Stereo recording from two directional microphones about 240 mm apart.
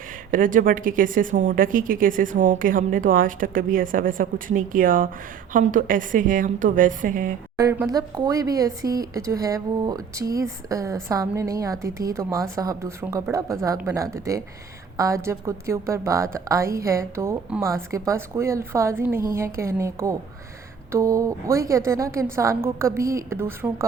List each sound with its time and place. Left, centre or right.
0.3 s speech: right
7.6 s speech: centre